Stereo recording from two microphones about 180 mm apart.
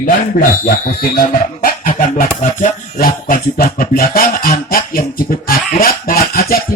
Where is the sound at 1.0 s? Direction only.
50° left (ahead or behind).